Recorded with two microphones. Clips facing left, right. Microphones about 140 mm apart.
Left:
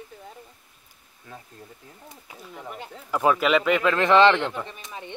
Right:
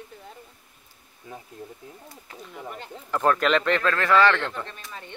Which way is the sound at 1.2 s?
20° right (ahead or behind).